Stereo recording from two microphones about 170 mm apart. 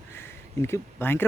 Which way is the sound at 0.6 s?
15° left (ahead or behind).